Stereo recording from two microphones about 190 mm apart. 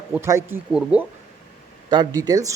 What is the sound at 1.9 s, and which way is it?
Speech, 20° right (ahead or behind).